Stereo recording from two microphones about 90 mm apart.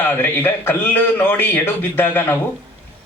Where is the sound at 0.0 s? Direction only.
25° left (ahead or behind).